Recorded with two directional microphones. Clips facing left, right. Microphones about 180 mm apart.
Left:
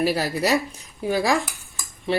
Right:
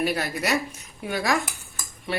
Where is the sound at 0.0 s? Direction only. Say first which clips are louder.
Left 4 dB; 30° left (ahead or behind).